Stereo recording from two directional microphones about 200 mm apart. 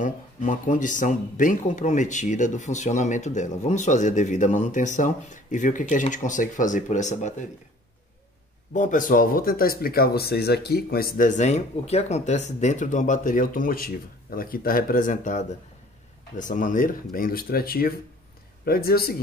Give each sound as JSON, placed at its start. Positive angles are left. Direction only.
{"t": 0.0, "sound": "speech", "side_deg": 40}
{"t": 8.7, "sound": "speech", "side_deg": 40}